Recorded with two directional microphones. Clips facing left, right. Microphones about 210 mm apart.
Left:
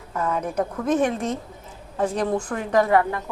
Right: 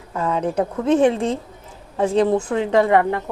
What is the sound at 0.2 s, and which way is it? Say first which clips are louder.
A woman's voice: right 4 dB; 25° right (ahead or behind).